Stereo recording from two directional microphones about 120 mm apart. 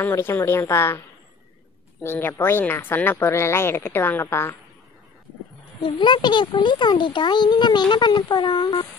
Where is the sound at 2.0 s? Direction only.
20° left (ahead or behind).